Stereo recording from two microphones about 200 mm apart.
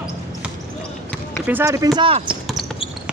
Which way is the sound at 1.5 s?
15° right (ahead or behind).